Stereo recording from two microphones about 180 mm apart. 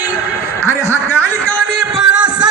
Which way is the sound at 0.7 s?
10° left (ahead or behind).